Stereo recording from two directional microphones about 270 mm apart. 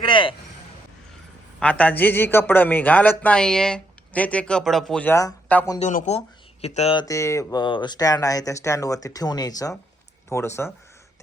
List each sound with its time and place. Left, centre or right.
0.0 s a sound: centre
1.5 s a man's voice: centre
5.8 s speech: left; by 10.7 s centre